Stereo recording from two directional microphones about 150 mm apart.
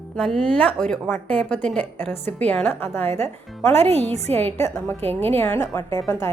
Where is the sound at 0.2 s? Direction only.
5° left (ahead or behind).